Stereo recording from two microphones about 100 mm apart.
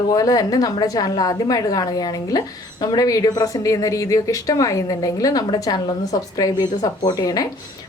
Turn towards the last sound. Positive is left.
turn(degrees=40)  # may be behind; listen again after turning